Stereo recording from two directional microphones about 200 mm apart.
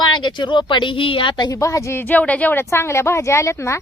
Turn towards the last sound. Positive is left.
turn(degrees=15)  # may be behind; listen again after turning